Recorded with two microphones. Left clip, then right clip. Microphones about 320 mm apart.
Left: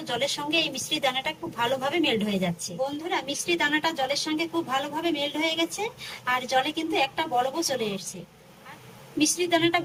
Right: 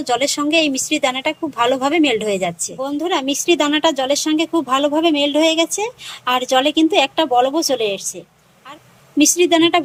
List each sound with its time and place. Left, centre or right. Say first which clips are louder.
0.0 s a woman's voice: right 10 dB; centre
9.1 s a woman's voice: right 10 dB; centre